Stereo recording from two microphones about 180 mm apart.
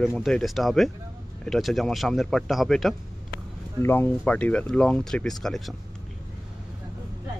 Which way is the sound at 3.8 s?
10° left (ahead or behind).